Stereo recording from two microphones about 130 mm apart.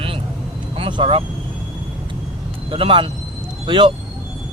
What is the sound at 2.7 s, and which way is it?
Speech, 45° right (ahead or behind).